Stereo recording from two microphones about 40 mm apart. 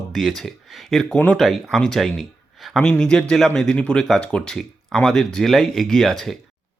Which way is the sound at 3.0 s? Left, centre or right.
Centre.